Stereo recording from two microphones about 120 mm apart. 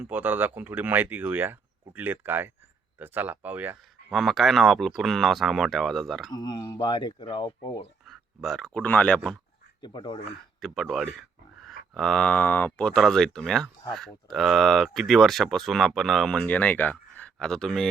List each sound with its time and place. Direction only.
0.0 s speech: 15° right (ahead or behind)
4.1 s speech: centre (ahead or behind)
6.3 s speech: 35° left (ahead or behind)
8.0 s a sound: centre (ahead or behind)
8.8 s speech: 10° left (ahead or behind)
9.8 s speech: 40° left (ahead or behind)
10.6 s speech: centre (ahead or behind)